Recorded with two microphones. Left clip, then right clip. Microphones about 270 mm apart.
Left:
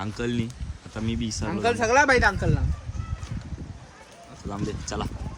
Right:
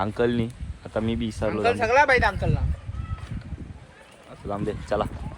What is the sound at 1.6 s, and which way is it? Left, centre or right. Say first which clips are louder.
Speech: even; left.